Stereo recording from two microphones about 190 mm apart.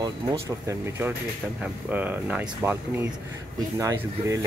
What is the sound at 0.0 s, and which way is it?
Speech, 15° right (ahead or behind).